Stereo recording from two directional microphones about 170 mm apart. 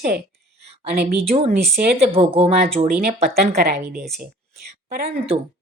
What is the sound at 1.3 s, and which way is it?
Speech, 40° right (ahead or behind).